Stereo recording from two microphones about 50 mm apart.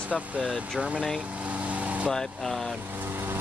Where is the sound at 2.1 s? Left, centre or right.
Centre.